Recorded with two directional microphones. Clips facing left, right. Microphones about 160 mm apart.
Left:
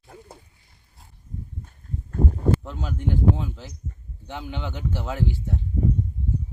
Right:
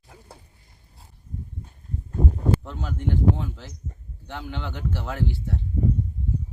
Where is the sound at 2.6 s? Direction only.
10° left (ahead or behind).